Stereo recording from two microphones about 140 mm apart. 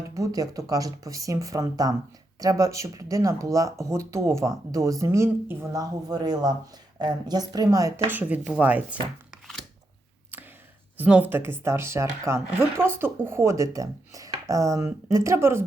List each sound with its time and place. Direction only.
0.1 s speech: 25° right (ahead or behind)
5.8 s speech: 30° right (ahead or behind); by 9.4 s 10° right (ahead or behind)
10.3 s a sound: 10° right (ahead or behind)
10.9 s speech: 10° right (ahead or behind)